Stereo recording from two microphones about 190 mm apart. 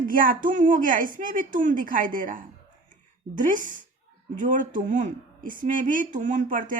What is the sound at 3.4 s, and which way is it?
Speech, 45° right (ahead or behind).